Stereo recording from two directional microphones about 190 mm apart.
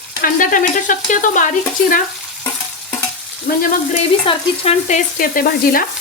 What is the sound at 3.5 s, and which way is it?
Speech, 45° left (ahead or behind).